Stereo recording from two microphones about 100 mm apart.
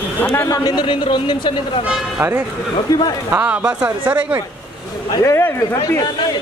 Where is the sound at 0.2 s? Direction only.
15° left (ahead or behind).